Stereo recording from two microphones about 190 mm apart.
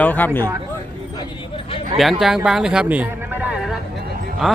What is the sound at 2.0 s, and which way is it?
A man's voice, centre (ahead or behind).